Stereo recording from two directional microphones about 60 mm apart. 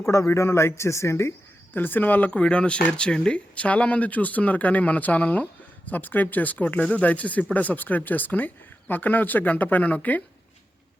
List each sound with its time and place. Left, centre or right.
0.0 s speech: left
1.7 s speech: left
2.4 s speech: centre